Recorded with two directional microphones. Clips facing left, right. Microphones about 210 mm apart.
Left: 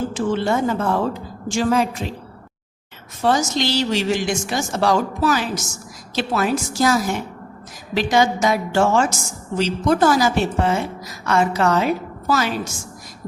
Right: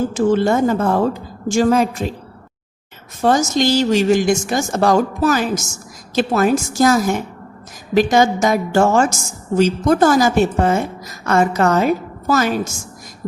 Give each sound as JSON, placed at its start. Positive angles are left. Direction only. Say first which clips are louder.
{"t": 0.1, "sound": "a woman's voice", "louder": "right 5 dB", "side_deg": -45}
{"t": 3.2, "sound": "a woman's voice", "louder": "right 4 dB", "side_deg": -45}